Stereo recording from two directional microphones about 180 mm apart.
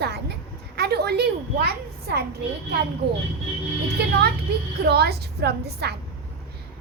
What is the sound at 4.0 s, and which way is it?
A woman's voice, 65° right (ahead or behind).